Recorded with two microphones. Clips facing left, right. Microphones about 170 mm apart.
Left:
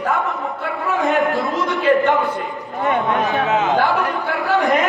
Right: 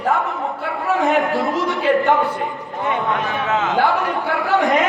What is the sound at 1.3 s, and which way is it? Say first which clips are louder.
Speech: right 1 dB; 40° right (ahead or behind).